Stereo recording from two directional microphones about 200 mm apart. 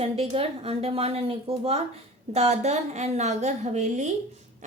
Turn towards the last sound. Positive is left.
turn(degrees=-35)  # may be behind; listen again after turning